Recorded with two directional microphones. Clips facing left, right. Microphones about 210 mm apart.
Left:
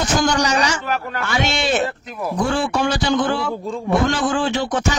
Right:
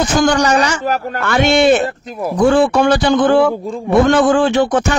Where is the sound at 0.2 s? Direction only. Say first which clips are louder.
Right 8 dB; 55° right (ahead or behind).